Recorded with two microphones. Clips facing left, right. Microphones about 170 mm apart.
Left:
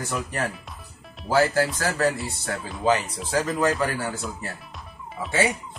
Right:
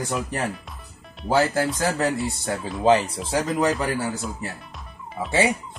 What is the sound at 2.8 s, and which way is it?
Speech, 30° right (ahead or behind).